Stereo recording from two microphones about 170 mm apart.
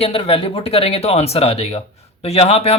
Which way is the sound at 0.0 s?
35° left (ahead or behind).